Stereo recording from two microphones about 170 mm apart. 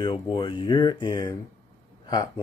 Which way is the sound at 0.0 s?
30° left (ahead or behind).